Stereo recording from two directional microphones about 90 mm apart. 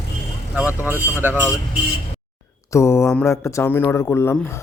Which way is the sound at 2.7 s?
30° left (ahead or behind).